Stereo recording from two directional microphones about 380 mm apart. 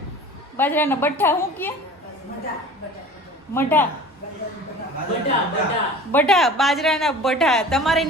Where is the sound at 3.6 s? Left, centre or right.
Centre.